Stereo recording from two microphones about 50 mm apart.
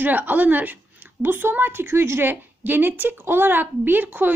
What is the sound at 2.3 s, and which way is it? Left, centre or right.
A woman's voice, right.